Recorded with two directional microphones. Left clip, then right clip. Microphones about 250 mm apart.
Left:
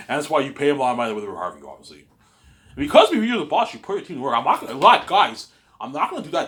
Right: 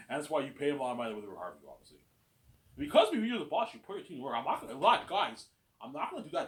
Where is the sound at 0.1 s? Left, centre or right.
Left.